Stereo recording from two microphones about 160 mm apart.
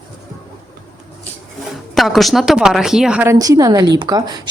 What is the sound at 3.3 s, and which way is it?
A woman's voice, 20° right (ahead or behind).